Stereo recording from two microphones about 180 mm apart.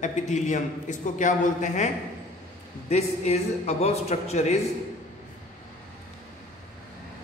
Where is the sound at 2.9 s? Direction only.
35° left (ahead or behind).